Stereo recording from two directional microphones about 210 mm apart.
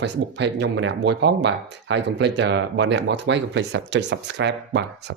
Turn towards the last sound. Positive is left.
turn(degrees=-55)  # may be behind; listen again after turning